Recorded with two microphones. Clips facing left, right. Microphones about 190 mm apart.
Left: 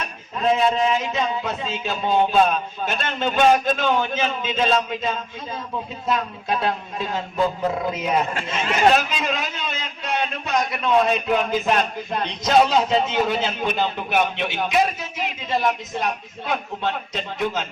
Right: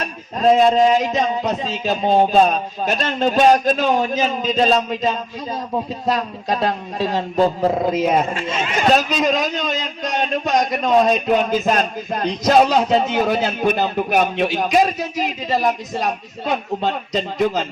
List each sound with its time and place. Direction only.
0.3 s a man's voice: 40° right (ahead or behind)